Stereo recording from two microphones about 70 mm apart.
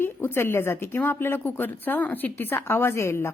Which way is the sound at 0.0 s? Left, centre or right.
Left.